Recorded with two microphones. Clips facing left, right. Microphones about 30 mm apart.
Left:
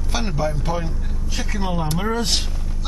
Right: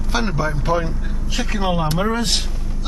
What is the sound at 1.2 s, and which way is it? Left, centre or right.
Speech, right.